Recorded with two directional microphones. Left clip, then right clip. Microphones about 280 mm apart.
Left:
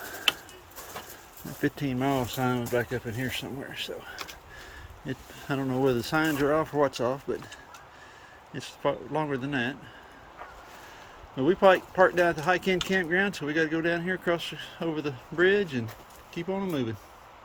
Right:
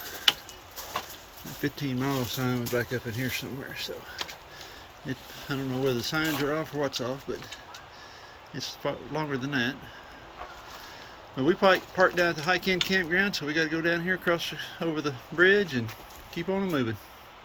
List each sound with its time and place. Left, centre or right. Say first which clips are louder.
1.6 s speech: left 3 dB; centre
5.0 s speech: left 1 dB; centre
8.5 s speech: left 3 dB; centre
11.3 s speech: left 2 dB; centre